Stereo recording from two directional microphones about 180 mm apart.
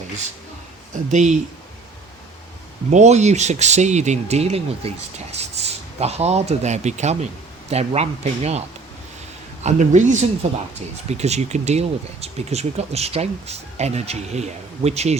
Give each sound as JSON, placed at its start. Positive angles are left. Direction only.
{"t": 1.1, "sound": "speech", "side_deg": -40}
{"t": 2.9, "sound": "speech", "side_deg": -40}
{"t": 9.6, "sound": "speech", "side_deg": -40}